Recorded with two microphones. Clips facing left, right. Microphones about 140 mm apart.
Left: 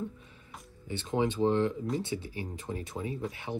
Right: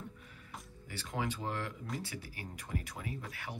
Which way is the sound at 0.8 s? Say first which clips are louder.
Left 9 dB; 25° left (ahead or behind).